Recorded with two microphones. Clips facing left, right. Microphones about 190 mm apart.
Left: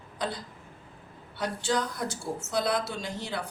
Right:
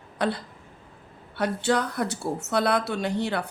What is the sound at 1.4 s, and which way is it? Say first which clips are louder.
Speech: right 5 dB; 60° right (ahead or behind).